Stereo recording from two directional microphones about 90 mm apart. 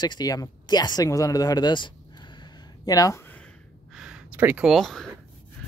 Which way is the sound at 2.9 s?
40° left (ahead or behind).